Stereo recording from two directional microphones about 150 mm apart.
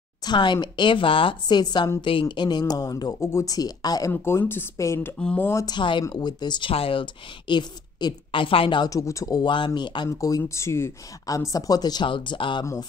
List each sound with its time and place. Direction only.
0.2 s speech: 30° left (ahead or behind)
5.2 s speech: 5° left (ahead or behind)
5.5 s speech: 20° left (ahead or behind)
5.8 s speech: 30° left (ahead or behind)